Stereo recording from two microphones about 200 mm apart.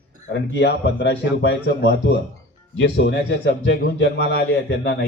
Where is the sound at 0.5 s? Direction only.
60° left (ahead or behind).